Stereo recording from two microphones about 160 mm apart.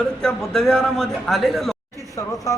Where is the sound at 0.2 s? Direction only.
5° left (ahead or behind).